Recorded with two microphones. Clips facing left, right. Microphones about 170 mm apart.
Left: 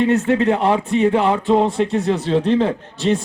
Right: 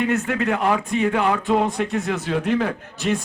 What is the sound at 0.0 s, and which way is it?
Speech, 30° left (ahead or behind).